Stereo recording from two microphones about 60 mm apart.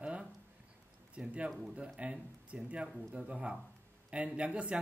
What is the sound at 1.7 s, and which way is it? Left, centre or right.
Speech, centre.